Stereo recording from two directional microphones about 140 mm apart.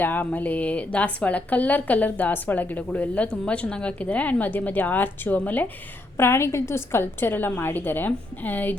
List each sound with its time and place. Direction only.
0.0 s a woman's voice: 10° left (ahead or behind)